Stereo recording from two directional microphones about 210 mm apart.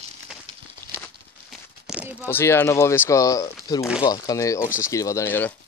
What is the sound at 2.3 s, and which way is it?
Speech, 10° left (ahead or behind).